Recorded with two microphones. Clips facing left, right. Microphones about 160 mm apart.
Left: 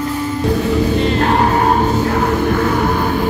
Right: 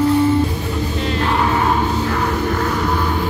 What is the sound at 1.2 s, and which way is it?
Music, 45° left (ahead or behind).